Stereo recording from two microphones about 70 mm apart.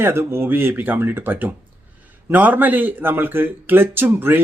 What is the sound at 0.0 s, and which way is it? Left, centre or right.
Speech, right.